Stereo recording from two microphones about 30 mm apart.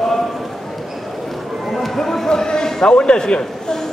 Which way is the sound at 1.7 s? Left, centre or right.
Centre.